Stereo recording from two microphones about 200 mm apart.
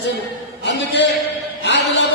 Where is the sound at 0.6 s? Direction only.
60° left (ahead or behind).